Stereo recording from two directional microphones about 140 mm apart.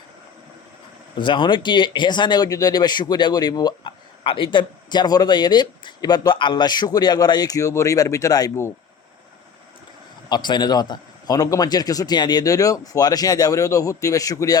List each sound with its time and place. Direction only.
1.2 s speech: 35° left (ahead or behind)
10.2 s a man's voice: 30° left (ahead or behind)